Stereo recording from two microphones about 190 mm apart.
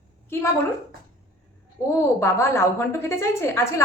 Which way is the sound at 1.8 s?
15° left (ahead or behind).